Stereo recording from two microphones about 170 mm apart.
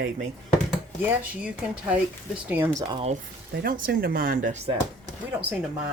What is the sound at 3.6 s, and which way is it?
Speech, 60° right (ahead or behind).